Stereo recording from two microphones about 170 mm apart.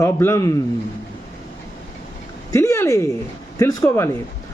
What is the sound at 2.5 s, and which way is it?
A man's voice, 15° left (ahead or behind).